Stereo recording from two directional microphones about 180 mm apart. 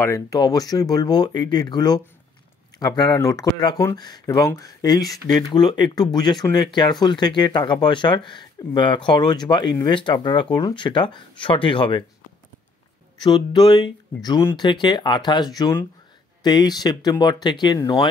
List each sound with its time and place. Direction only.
0.0 s speech: 20° left (ahead or behind)
13.2 s speech: 25° left (ahead or behind)